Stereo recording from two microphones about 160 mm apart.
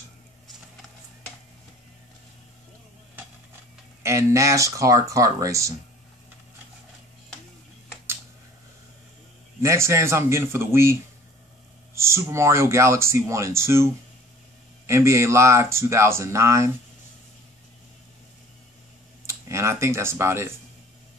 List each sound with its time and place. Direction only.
4.0 s speech: 15° right (ahead or behind)
9.6 s speech: 15° right (ahead or behind)
14.9 s speech: 15° right (ahead or behind)
19.2 s speech: 15° right (ahead or behind)